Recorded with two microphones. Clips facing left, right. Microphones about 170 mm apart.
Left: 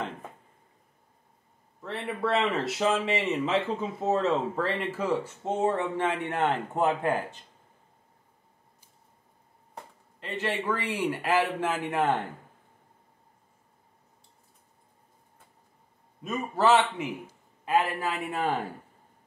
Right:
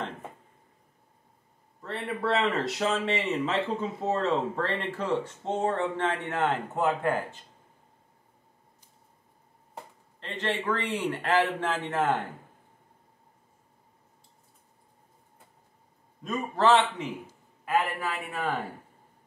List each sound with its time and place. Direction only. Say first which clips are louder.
1.8 s speech: left 1 dB; centre (ahead or behind); by 7.3 s 15° left (ahead or behind)
10.2 s a man's voice: even; 10° left (ahead or behind)
16.3 s speech: even; 5° left (ahead or behind)
17.6 s a man's voice: left 2 dB; 20° left (ahead or behind)